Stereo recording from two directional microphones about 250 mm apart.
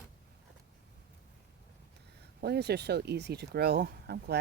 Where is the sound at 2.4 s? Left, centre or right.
Right.